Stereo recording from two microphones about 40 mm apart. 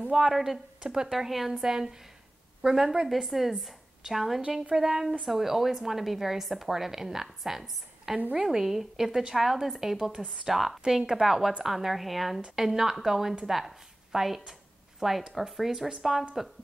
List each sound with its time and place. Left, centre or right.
0.3 s a woman's voice: centre
10.2 s a woman's voice: centre
10.5 s a woman's voice: centre